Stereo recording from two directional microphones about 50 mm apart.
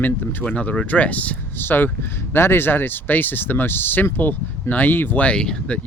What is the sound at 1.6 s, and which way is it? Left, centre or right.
Speech, left.